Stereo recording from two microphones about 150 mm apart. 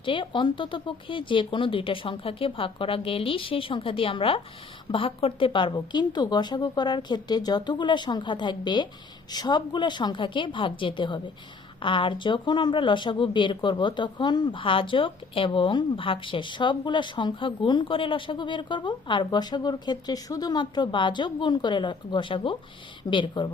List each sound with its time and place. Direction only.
0.0 s a woman's voice: 35° left (ahead or behind)